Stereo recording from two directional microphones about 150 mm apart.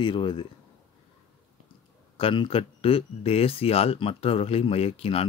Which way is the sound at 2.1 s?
35° left (ahead or behind).